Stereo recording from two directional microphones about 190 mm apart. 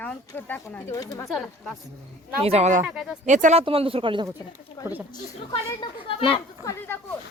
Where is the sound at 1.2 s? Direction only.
Centre (ahead or behind).